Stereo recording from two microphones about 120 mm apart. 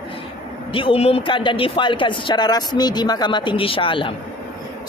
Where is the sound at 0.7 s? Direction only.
50° left (ahead or behind).